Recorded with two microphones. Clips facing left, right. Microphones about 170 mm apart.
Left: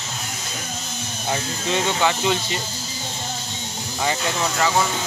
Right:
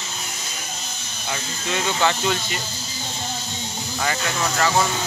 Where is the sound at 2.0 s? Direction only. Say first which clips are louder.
Right 1 dB; 15° left (ahead or behind).